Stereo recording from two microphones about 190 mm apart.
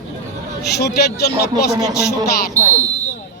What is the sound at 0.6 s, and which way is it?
Speech, 60° left (ahead or behind).